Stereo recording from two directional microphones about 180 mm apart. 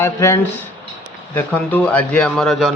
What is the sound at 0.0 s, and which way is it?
Speech, 15° left (ahead or behind).